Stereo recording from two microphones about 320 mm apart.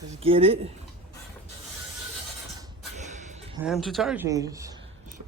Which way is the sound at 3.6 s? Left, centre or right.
Centre.